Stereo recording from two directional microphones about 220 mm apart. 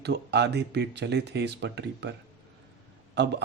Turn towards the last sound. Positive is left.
turn(degrees=-50)  # may be behind; listen again after turning